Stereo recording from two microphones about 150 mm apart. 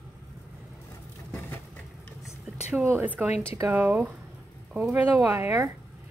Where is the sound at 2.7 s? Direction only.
15° right (ahead or behind).